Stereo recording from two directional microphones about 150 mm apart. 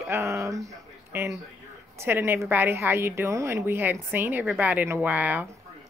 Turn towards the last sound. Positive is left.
turn(degrees=-10)  # may be behind; listen again after turning